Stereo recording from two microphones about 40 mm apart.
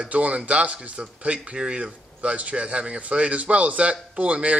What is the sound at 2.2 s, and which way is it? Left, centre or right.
Speech, right.